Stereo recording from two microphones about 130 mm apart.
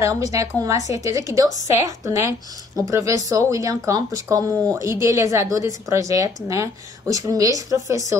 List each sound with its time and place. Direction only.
0.0 s speech: 25° right (ahead or behind)